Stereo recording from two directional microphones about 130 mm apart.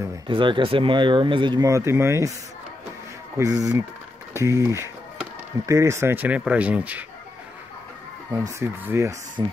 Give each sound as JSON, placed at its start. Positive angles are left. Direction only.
{"t": 0.3, "sound": "speech", "side_deg": -40}
{"t": 1.7, "sound": "speech", "side_deg": -20}
{"t": 3.3, "sound": "speech", "side_deg": -25}
{"t": 8.5, "sound": "speech", "side_deg": -20}